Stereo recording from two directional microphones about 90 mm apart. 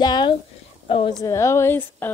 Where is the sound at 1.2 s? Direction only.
35° left (ahead or behind).